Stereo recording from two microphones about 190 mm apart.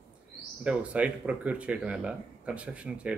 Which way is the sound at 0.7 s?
5° right (ahead or behind).